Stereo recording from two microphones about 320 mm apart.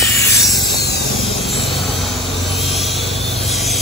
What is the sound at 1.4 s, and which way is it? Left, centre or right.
Vehicle, centre.